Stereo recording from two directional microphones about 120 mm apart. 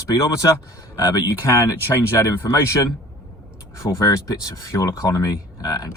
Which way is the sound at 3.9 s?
30° left (ahead or behind).